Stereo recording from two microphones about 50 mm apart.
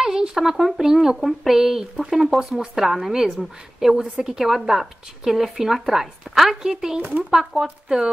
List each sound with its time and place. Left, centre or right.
0.0 s speech: centre